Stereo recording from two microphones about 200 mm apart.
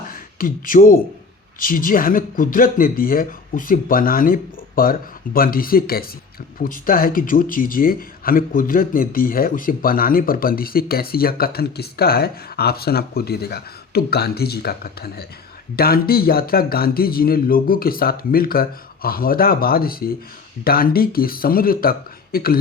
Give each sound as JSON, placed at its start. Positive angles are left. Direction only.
{"t": 0.1, "sound": "speech", "side_deg": 45}